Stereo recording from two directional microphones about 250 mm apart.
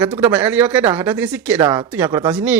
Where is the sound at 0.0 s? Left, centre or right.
Centre.